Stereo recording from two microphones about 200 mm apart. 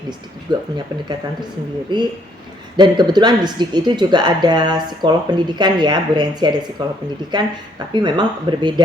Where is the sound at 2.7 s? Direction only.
20° right (ahead or behind).